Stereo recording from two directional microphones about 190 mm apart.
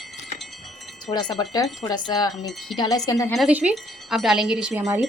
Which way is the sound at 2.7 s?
20° left (ahead or behind).